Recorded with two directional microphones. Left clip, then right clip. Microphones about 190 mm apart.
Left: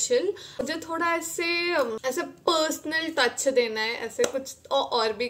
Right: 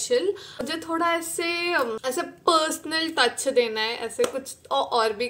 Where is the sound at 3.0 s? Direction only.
Centre (ahead or behind).